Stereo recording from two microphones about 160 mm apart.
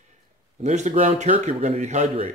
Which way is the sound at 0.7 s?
45° right (ahead or behind).